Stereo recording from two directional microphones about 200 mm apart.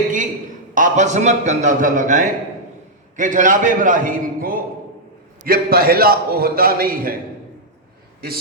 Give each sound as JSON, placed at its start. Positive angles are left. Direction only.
{"t": 0.7, "sound": "a man's voice", "side_deg": -40}